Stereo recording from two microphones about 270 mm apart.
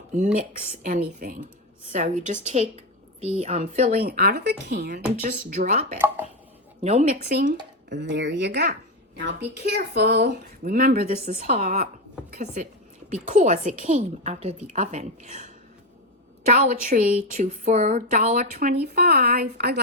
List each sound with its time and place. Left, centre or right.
0.8 s a woman's voice: right
4.0 s a woman's voice: right
7.3 s a woman's voice: right
16.5 s speech: right